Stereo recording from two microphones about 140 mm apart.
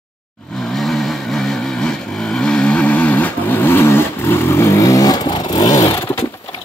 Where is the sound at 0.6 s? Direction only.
Centre (ahead or behind).